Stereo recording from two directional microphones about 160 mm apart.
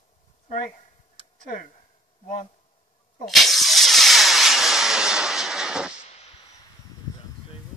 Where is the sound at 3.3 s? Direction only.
Centre (ahead or behind).